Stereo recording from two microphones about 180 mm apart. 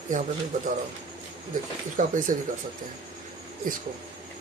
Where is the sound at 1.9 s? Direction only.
45° right (ahead or behind).